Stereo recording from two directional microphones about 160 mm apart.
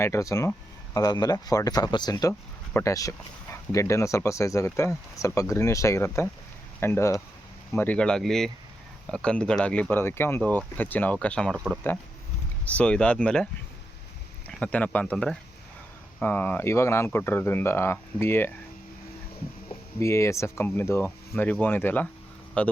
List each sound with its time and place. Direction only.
0.0 s speech: 20° left (ahead or behind)
20.0 s speech: 15° left (ahead or behind)